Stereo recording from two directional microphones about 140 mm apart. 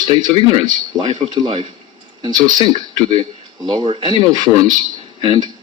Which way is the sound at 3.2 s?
30° right (ahead or behind).